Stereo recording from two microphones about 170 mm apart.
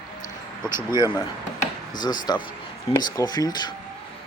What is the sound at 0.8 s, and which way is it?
Speech, 25° left (ahead or behind).